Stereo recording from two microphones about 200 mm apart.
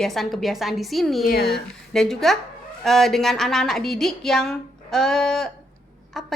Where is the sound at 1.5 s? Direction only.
Centre (ahead or behind).